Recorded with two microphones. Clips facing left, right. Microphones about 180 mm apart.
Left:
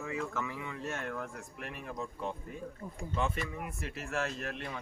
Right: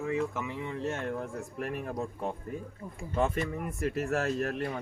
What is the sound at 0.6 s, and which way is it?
Speech, 30° right (ahead or behind).